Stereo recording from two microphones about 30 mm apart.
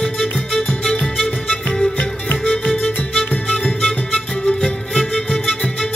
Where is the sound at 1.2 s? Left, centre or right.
Left.